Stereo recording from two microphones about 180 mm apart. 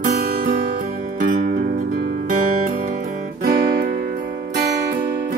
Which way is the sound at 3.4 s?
50° right (ahead or behind).